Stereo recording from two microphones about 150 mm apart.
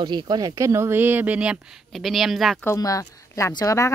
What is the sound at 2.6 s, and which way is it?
Speech, 20° left (ahead or behind).